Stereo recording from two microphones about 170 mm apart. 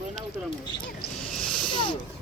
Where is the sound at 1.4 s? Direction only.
Centre (ahead or behind).